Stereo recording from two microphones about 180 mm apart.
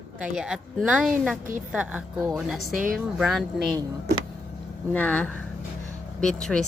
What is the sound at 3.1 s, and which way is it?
Speech, centre (ahead or behind).